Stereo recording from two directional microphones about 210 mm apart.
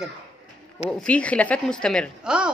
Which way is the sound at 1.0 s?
5° left (ahead or behind).